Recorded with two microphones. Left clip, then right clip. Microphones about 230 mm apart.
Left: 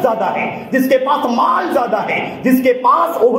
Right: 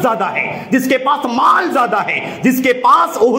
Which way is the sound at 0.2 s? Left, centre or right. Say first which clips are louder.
Even; right.